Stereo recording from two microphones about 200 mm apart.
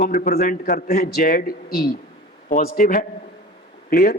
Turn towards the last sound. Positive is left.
turn(degrees=50)  # may be behind; listen again after turning